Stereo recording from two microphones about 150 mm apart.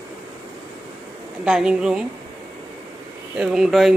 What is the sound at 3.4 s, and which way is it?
Speech, 5° right (ahead or behind).